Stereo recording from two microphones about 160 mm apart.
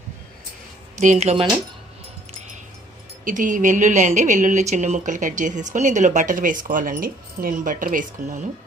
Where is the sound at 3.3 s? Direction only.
55° right (ahead or behind).